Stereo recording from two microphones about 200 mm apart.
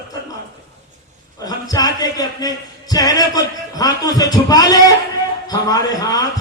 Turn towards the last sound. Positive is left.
turn(degrees=20)  # may be behind; listen again after turning